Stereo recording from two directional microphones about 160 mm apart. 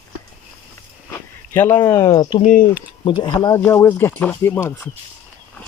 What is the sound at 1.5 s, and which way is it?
Speech, 15° left (ahead or behind).